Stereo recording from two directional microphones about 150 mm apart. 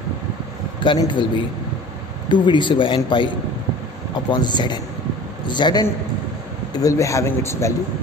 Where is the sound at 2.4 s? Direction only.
30° left (ahead or behind).